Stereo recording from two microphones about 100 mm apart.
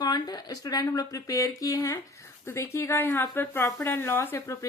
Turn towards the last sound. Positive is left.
turn(degrees=25)  # may be behind; listen again after turning